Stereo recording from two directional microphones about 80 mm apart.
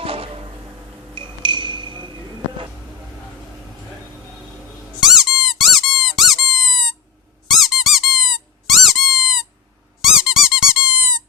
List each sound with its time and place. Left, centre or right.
1.1 s music: right
4.9 s squeak: centre